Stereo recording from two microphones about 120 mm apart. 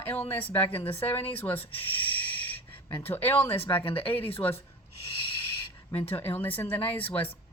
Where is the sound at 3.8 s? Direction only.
50° left (ahead or behind).